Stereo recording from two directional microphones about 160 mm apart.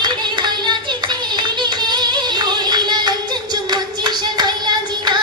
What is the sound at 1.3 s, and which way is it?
Music, 30° right (ahead or behind).